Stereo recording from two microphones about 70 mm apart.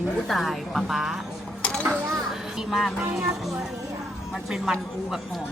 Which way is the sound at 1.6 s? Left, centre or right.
Centre.